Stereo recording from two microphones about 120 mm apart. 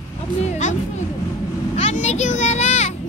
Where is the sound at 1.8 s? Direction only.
75° left (ahead or behind).